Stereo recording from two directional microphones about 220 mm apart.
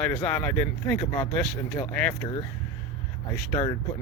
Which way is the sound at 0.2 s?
5° left (ahead or behind).